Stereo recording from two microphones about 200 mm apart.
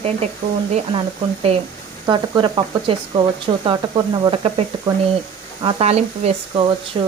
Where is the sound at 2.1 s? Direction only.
25° right (ahead or behind).